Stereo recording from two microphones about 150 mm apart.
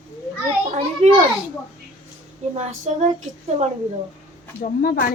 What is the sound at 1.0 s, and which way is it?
Speech, 50° right (ahead or behind).